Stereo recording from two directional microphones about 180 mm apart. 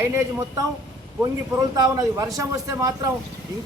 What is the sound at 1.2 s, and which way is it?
A man's voice, 20° right (ahead or behind).